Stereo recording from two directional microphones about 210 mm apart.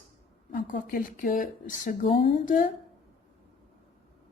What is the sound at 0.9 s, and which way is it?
Speech, 40° left (ahead or behind).